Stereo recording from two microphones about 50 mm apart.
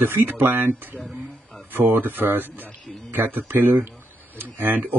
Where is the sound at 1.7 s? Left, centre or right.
Right.